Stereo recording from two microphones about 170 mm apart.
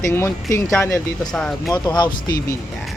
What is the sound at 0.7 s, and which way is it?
Speech, 5° left (ahead or behind).